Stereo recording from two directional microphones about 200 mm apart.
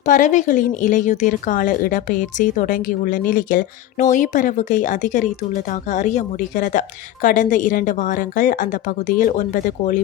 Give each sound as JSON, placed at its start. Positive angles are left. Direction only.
{"t": 0.0, "sound": "a woman's voice", "side_deg": 40}